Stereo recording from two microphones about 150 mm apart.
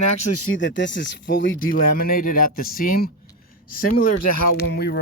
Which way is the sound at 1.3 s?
70° left (ahead or behind).